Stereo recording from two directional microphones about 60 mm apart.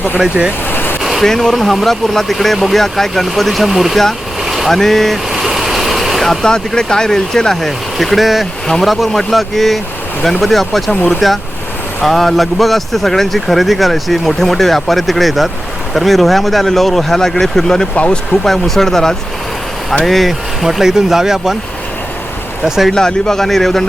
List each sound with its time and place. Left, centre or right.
0.2 s speech: centre
0.7 s a sound: left
1.0 s speech: centre
4.4 s vehicle: centre
6.4 s speech: centre
17.9 s speech: left
18.4 s speech: centre
22.6 s speech: centre
22.9 s speech: centre